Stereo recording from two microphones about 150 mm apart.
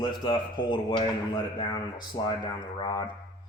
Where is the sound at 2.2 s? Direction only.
30° left (ahead or behind).